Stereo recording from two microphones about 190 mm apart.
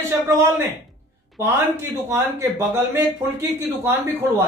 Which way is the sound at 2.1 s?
10° right (ahead or behind).